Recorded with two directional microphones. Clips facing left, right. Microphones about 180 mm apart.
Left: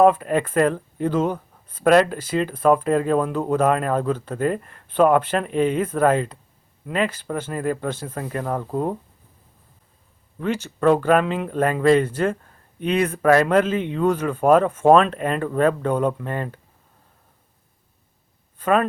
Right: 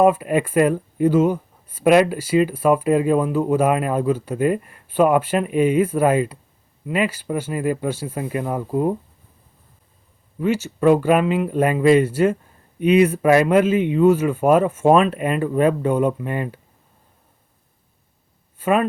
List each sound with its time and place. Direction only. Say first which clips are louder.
0.0 s speech: even; 10° right (ahead or behind)
10.4 s speech: right 2 dB; 10° right (ahead or behind)
18.6 s speech: right 1 dB; 5° right (ahead or behind)